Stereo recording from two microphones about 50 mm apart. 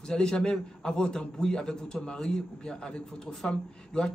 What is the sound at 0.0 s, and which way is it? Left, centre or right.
A man's voice, centre.